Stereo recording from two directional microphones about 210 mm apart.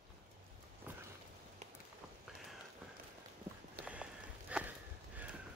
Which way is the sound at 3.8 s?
5° right (ahead or behind).